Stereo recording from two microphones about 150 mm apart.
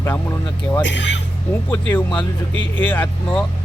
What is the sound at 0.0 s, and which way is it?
Speech, 15° left (ahead or behind).